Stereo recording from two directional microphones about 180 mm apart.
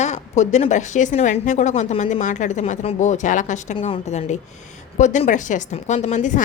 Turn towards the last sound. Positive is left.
turn(degrees=45)  # may be behind; listen again after turning